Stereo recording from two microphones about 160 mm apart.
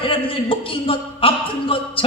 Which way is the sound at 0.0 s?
35° left (ahead or behind).